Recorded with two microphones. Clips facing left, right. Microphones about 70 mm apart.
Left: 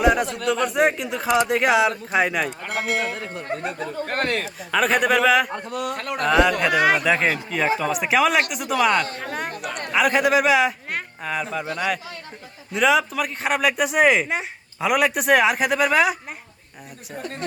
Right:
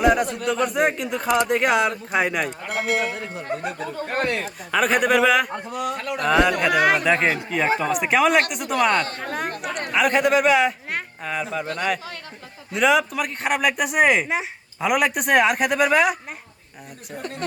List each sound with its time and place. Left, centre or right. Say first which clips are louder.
0.0 s speech: even; centre
0.3 s speech: left 1 dB; left
0.6 s speech: left 1 dB; centre
3.3 s speech: even; left
4.0 s speech: even; left
4.7 s speech: even; centre
5.7 s speech: right 1 dB; left
6.2 s speech: even; centre
9.0 s speech: even; right
9.2 s speech: right 1 dB; centre
9.6 s speech: right 2 dB; right
9.9 s a man's voice: even; centre
12.7 s speech: even; centre